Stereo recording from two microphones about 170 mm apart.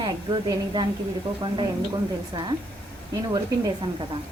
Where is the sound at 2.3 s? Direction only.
25° right (ahead or behind).